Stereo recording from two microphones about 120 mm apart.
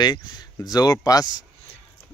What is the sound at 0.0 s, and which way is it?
Speech, 35° left (ahead or behind).